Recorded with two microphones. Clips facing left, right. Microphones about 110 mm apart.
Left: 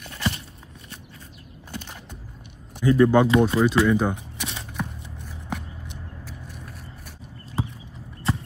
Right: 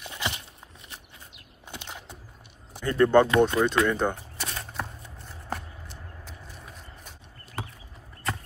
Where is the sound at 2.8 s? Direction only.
10° left (ahead or behind).